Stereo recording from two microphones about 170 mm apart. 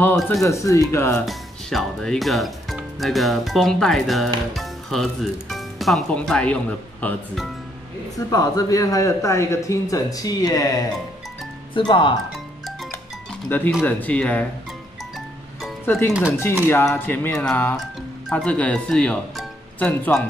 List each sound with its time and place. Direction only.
0.4 s speech: 20° left (ahead or behind)
1.2 s speech: centre (ahead or behind)
8.3 s a man's voice: 20° left (ahead or behind)
13.3 s speech: 10° left (ahead or behind)
15.8 s speech: 15° left (ahead or behind)
16.1 s speech: 5° right (ahead or behind)
16.6 s speech: 15° left (ahead or behind)